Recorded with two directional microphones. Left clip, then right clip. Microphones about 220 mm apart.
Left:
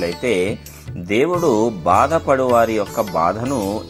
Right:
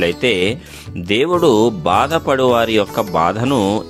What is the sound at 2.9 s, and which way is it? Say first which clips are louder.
Speech: right 2 dB; 35° right (ahead or behind).